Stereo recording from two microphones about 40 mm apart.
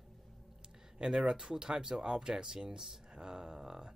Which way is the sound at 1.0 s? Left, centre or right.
Centre.